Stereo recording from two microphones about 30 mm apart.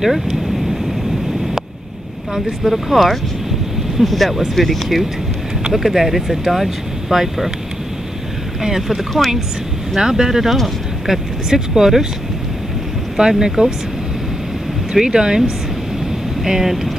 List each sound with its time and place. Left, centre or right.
0.0 s speech: centre
2.3 s speech: centre
8.6 s speech: centre
13.2 s speech: right
14.9 s speech: right